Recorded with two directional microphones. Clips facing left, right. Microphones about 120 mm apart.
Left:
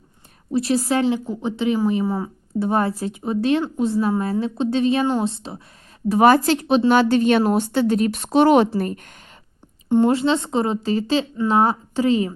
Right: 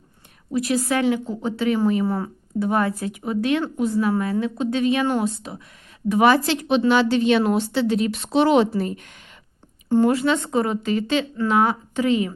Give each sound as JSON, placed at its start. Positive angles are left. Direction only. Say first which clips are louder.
{"t": 0.5, "sound": "speech", "louder": "left 2 dB", "side_deg": 30}
{"t": 1.2, "sound": "speech", "louder": "left 1 dB", "side_deg": 15}
{"t": 2.5, "sound": "speech", "louder": "left 1 dB", "side_deg": 30}
{"t": 6.1, "sound": "a woman's voice", "louder": "left 2 dB", "side_deg": 40}
{"t": 9.9, "sound": "speech", "louder": "left 1 dB", "side_deg": 25}